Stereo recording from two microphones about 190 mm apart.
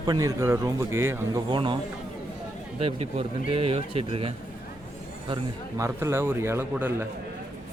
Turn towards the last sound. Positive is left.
turn(degrees=-10)  # may be behind; listen again after turning